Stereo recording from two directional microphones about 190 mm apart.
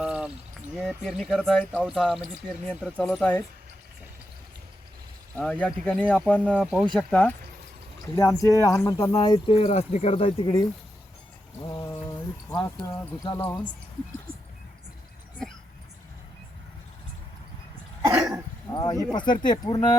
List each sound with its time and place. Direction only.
0.0 s a sound: 5° right (ahead or behind)
0.8 s speech: centre (ahead or behind)
5.4 s speech: 5° left (ahead or behind)
8.4 s speech: 15° left (ahead or behind)
11.6 s mantra: 20° left (ahead or behind)
12.5 s speech: 20° left (ahead or behind)
14.3 s a sound: 50° right (ahead or behind)
18.7 s speech: 20° left (ahead or behind)